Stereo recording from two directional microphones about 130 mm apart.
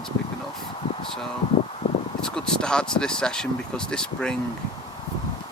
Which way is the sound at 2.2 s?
5° left (ahead or behind).